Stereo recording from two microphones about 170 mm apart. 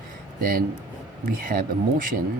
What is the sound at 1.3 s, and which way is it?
Speech, 55° right (ahead or behind).